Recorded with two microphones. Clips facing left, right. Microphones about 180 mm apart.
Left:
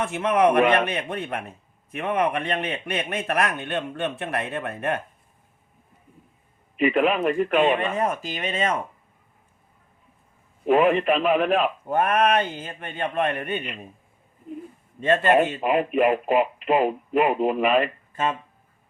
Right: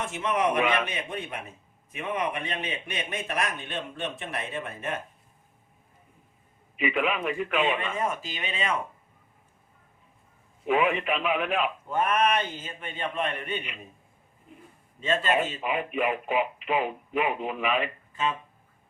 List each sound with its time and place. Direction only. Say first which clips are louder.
0.0 s a man's voice: left 7 dB; 60° left (ahead or behind)
6.8 s speech: left 7 dB; 40° left (ahead or behind)
10.7 s speech: left 6 dB; 40° left (ahead or behind)
11.9 s speech: left 4 dB; 55° left (ahead or behind)
15.0 s a man's voice: left 7 dB; 60° left (ahead or behind)
15.6 s speech: left 7 dB; 40° left (ahead or behind)